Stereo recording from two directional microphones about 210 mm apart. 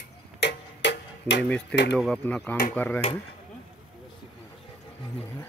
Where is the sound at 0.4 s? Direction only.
55° left (ahead or behind).